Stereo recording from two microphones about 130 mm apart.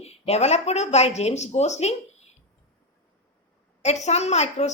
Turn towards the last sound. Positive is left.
turn(degrees=55)  # may be behind; listen again after turning